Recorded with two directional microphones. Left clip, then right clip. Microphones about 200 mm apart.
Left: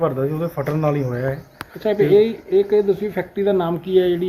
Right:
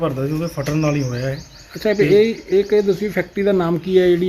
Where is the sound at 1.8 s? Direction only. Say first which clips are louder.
Right 1 dB; 50° right (ahead or behind).